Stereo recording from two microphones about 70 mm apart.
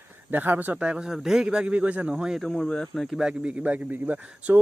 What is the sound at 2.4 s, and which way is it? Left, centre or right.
Speech, centre.